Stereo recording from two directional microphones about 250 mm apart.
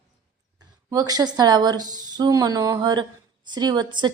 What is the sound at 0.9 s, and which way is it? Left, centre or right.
A woman's voice, centre.